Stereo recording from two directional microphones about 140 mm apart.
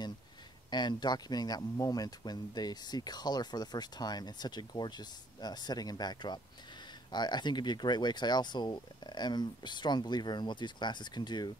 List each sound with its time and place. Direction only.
0.7 s speech: 30° left (ahead or behind)